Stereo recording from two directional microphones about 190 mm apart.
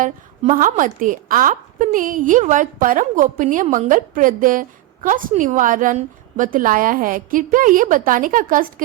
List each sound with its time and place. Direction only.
0.0 s a woman's voice: 45° right (ahead or behind)